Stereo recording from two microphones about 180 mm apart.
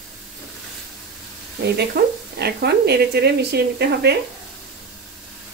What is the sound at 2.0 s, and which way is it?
A woman's voice, 60° right (ahead or behind).